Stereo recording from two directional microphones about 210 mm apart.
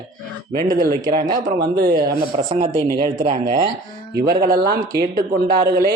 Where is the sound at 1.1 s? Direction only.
40° right (ahead or behind).